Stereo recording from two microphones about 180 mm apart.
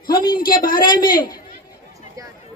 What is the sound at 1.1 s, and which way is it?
Speech, 55° left (ahead or behind).